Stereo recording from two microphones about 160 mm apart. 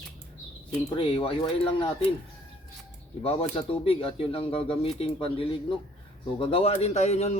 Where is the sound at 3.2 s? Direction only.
40° left (ahead or behind).